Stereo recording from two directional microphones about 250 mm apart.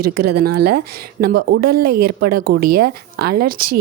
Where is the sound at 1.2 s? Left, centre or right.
Right.